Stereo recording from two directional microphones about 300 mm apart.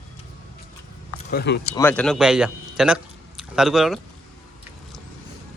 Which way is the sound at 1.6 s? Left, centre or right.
Centre.